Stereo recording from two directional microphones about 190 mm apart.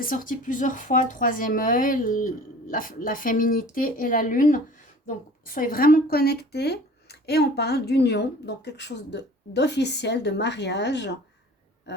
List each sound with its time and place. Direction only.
0.0 s a woman's voice: 45° left (ahead or behind); by 11.2 s 65° left (ahead or behind)